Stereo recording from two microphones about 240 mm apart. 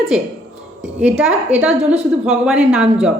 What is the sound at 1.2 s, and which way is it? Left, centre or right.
A woman's voice, centre.